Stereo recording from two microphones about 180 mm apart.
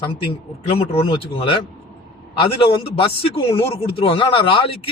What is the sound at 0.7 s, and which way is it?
Speech, 30° left (ahead or behind).